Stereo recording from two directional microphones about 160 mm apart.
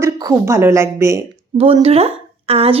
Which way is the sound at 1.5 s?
35° right (ahead or behind).